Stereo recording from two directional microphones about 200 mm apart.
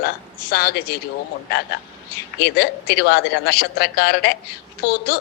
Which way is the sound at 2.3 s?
60° left (ahead or behind).